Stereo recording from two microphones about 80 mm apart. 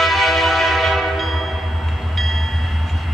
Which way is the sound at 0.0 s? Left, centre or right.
Centre.